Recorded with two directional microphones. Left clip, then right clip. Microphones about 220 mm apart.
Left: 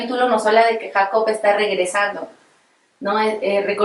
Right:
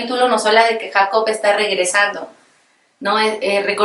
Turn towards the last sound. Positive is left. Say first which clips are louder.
# right 2 dB
turn(degrees=5)  # may be behind; listen again after turning